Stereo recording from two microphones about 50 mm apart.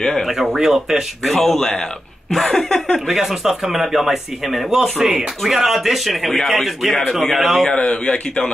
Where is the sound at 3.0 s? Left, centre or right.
Centre.